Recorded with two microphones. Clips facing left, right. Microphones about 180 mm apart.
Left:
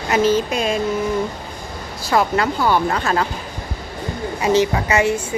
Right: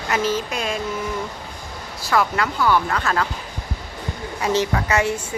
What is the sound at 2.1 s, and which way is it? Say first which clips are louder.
Speech: left 3 dB; 25° left (ahead or behind).